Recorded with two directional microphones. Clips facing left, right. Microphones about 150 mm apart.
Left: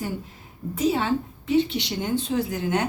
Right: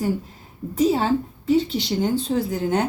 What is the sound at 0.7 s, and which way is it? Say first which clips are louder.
A woman's voice: right 4 dB; 35° right (ahead or behind).